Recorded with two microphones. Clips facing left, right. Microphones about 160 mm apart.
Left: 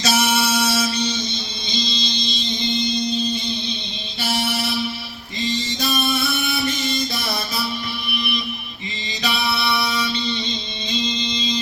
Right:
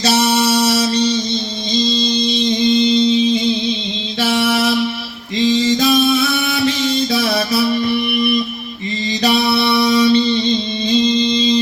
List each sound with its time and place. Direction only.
0.0 s music: 35° right (ahead or behind)
2.0 s music: 65° right (ahead or behind); by 3.6 s 90° right
4.2 s mantra: 90° right; by 7.8 s 70° right (ahead or behind)
9.2 s music: 40° right (ahead or behind)